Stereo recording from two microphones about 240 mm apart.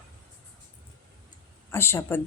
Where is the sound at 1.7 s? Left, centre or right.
Centre.